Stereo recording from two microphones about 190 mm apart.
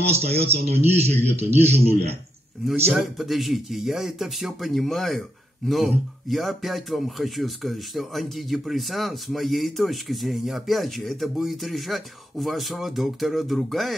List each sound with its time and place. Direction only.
0.1 s speech: 35° right (ahead or behind)
2.9 s speech: centre (ahead or behind)